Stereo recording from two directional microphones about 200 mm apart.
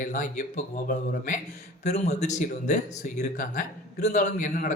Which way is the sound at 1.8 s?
35° left (ahead or behind).